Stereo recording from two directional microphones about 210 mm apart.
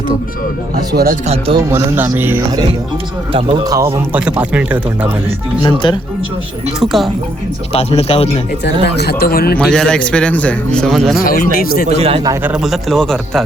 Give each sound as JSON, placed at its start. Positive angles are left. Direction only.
{"t": 1.3, "sound": "a man's voice", "side_deg": -25}
{"t": 1.7, "sound": "speech", "side_deg": -10}
{"t": 3.3, "sound": "speech", "side_deg": -20}
{"t": 5.6, "sound": "speech", "side_deg": 20}
{"t": 6.7, "sound": "a man's voice", "side_deg": 0}
{"t": 7.7, "sound": "speech", "side_deg": 30}
{"t": 8.6, "sound": "speech", "side_deg": 55}
{"t": 9.6, "sound": "a man's voice", "side_deg": 5}
{"t": 11.2, "sound": "speech", "side_deg": 45}
{"t": 11.9, "sound": "a man's voice", "side_deg": -30}
{"t": 12.3, "sound": "a man's voice", "side_deg": -10}